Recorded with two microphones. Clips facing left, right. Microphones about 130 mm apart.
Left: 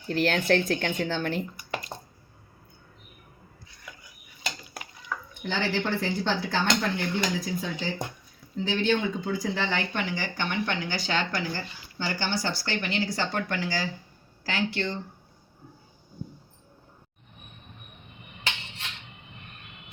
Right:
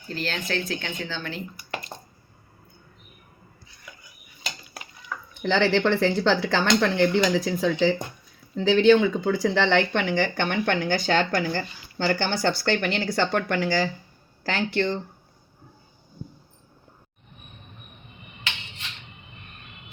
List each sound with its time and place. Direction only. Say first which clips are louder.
0.1 s speech: left 6 dB; 60° left (ahead or behind)
5.4 s speech: right 8 dB; 90° right; by 14.8 s 55° right (ahead or behind)